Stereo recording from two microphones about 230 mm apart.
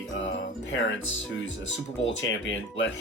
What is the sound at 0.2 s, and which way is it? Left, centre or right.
Music, left.